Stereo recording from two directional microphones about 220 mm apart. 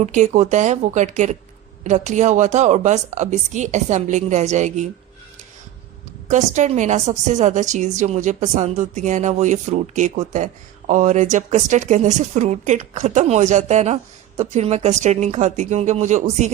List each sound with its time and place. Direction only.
0.0 s a woman's voice: 35° right (ahead or behind)
6.2 s a woman's voice: 35° right (ahead or behind)